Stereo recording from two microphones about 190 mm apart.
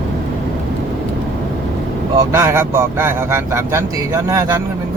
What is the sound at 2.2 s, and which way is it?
Speech, 15° right (ahead or behind).